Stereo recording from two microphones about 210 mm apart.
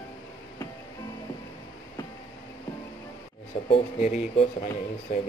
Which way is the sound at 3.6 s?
35° left (ahead or behind).